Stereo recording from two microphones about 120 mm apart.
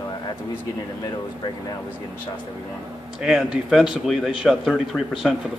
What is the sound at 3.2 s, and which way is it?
Speech, 5° right (ahead or behind).